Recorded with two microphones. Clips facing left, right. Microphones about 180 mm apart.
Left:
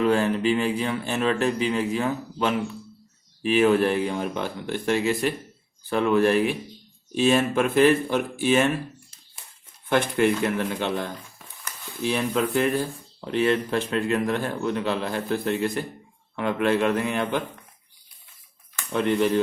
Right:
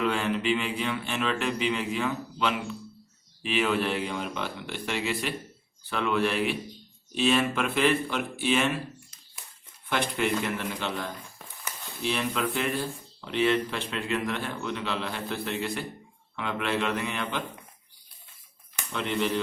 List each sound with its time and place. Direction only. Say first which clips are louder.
0.0 s speech: left 6 dB; 40° left (ahead or behind)
9.9 s speech: left 6 dB; 50° left (ahead or behind)
18.9 s speech: left 7 dB; 50° left (ahead or behind)